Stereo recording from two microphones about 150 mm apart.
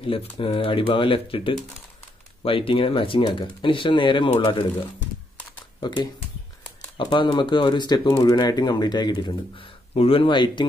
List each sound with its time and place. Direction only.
0.0 s speech: 35° left (ahead or behind)
5.8 s speech: 30° left (ahead or behind)